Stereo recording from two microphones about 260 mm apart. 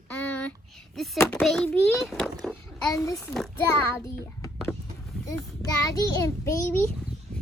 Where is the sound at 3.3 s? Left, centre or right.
Centre.